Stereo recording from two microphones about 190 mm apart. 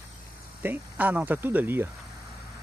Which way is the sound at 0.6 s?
10° right (ahead or behind).